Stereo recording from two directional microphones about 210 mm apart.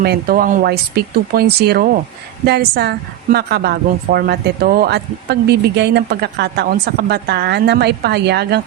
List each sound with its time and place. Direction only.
0.0 s a woman's voice: 45° right (ahead or behind)